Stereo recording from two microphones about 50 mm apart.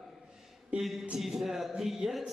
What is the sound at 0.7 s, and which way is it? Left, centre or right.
Speech, right.